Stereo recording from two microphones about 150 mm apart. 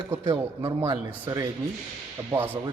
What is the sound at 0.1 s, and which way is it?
Speech, 15° right (ahead or behind).